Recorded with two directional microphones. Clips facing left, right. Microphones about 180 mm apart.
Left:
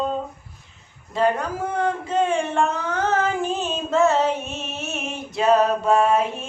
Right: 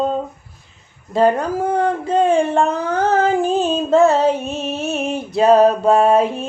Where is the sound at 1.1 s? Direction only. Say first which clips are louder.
Right 6 dB; 35° right (ahead or behind).